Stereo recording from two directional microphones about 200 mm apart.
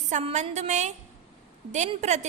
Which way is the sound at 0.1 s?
35° right (ahead or behind).